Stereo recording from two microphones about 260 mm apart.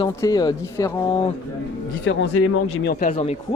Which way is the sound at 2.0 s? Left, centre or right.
Left.